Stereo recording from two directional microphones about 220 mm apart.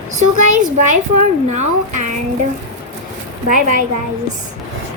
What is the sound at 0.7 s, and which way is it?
A woman's voice, 35° right (ahead or behind).